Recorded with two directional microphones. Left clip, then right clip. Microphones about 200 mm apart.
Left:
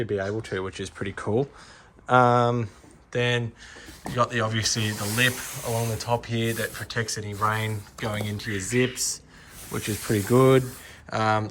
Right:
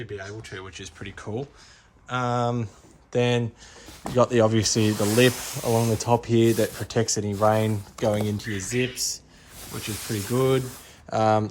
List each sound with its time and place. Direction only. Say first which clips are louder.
0.0 s speech: left 8 dB; centre (ahead or behind); by 2.6 s 15° right (ahead or behind)
3.1 s speech: right 2 dB; 25° right (ahead or behind)
8.5 s speech: left 4 dB; 10° right (ahead or behind)
10.3 s speech: left 4 dB; 10° right (ahead or behind)
10.7 s speech: right 2 dB; 25° right (ahead or behind)